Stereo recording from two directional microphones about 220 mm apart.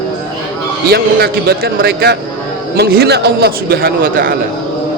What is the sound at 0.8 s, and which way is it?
A man's voice, 45° right (ahead or behind).